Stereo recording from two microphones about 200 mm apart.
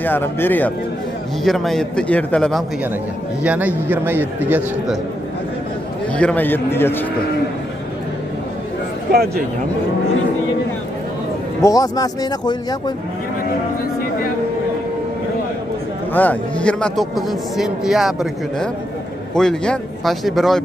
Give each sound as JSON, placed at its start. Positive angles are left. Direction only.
{"t": 0.0, "sound": "a man's voice", "side_deg": 10}
{"t": 3.4, "sound": "a man's voice", "side_deg": -10}
{"t": 6.1, "sound": "a man's voice", "side_deg": 5}
{"t": 9.1, "sound": "speech", "side_deg": -50}
{"t": 11.6, "sound": "speech", "side_deg": 20}
{"t": 16.1, "sound": "a man's voice", "side_deg": 10}